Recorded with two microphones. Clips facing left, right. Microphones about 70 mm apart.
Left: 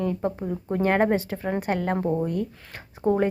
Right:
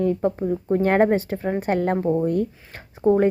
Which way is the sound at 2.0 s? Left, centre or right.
Centre.